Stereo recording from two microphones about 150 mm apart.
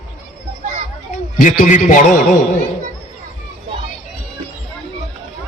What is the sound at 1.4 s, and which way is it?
Speech, 55° left (ahead or behind).